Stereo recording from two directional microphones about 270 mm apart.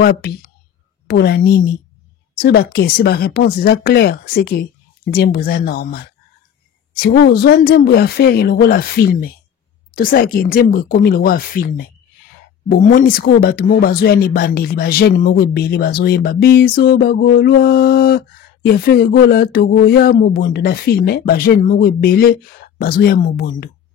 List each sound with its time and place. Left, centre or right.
1.0 s speech: left